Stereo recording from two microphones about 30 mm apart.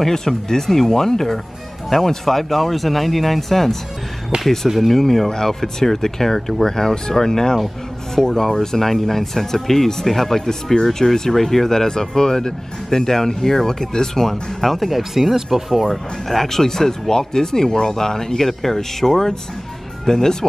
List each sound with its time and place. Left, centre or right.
0.0 s speech: centre
4.7 s speech: centre
14.3 s speech: centre
16.3 s speech: centre